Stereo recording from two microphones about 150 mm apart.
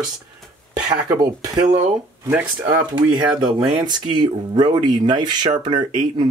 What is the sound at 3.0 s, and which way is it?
Speech, 35° right (ahead or behind).